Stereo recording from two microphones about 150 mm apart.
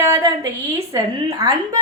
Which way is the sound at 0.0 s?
20° right (ahead or behind).